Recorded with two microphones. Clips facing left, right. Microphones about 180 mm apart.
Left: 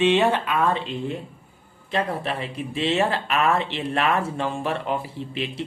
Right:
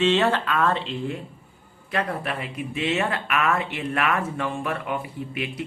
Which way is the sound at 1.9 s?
30° left (ahead or behind).